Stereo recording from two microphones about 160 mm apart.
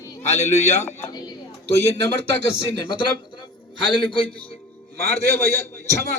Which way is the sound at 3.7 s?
30° left (ahead or behind).